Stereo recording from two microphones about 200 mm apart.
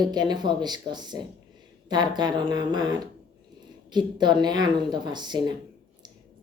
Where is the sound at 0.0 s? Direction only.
20° right (ahead or behind).